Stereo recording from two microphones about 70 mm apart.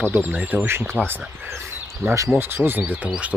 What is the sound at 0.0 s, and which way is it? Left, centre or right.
Speech, right.